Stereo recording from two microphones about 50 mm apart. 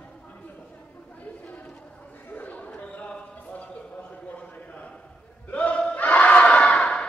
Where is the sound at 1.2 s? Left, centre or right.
Left.